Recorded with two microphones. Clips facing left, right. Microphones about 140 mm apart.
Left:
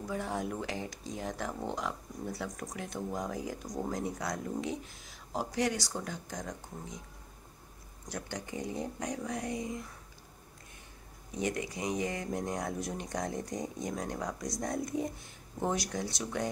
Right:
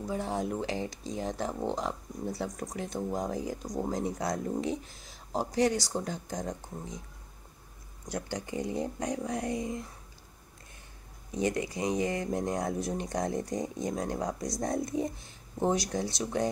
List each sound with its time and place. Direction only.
0.1 s speech: 25° right (ahead or behind)
8.1 s speech: 25° right (ahead or behind)
11.3 s speech: 30° right (ahead or behind)